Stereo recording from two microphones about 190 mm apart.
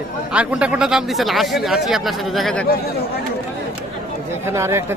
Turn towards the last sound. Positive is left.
turn(degrees=-15)  # may be behind; listen again after turning